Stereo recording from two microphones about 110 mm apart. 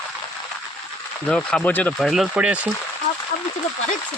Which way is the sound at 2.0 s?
Centre (ahead or behind).